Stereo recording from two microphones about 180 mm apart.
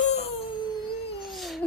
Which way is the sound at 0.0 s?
40° left (ahead or behind).